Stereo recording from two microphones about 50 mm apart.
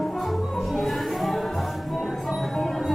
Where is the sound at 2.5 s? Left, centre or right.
Centre.